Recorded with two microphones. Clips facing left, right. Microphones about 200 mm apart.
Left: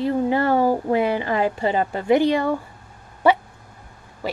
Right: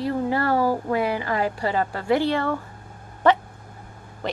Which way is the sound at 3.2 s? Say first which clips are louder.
Left 1 dB; 10° left (ahead or behind).